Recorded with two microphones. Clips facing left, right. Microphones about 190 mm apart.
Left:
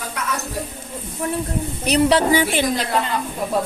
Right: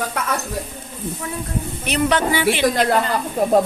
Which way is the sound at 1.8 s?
35° left (ahead or behind).